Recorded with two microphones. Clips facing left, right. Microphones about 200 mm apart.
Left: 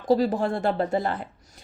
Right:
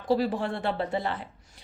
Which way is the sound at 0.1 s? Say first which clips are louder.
Left 4 dB; 40° left (ahead or behind).